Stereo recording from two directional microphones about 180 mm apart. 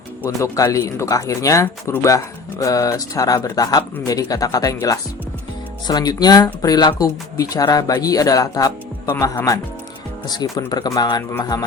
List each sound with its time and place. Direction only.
0.3 s speech: 15° left (ahead or behind)